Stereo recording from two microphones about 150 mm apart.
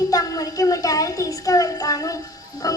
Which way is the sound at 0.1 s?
25° left (ahead or behind).